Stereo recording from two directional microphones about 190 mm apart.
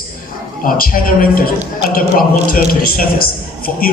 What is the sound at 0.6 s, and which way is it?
A man's voice, 50° left (ahead or behind).